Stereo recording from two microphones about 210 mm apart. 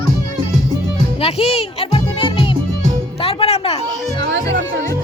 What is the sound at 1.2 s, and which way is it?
Music, 30° left (ahead or behind).